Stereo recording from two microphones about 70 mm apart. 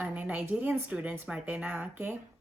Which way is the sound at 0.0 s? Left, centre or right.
Right.